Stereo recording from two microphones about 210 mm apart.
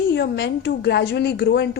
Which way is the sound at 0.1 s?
50° left (ahead or behind).